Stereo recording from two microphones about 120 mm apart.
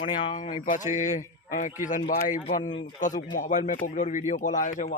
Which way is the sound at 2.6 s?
40° left (ahead or behind).